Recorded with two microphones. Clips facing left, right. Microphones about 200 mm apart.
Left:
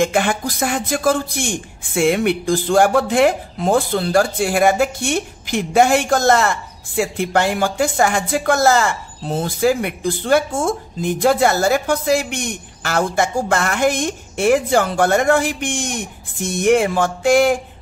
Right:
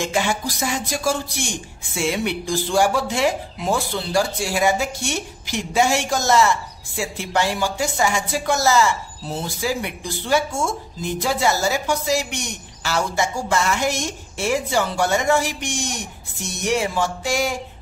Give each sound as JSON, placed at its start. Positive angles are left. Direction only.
{"t": 0.0, "sound": "speech", "side_deg": 55}